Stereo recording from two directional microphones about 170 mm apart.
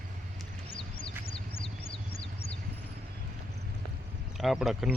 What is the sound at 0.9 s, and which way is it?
Vehicle, 30° left (ahead or behind).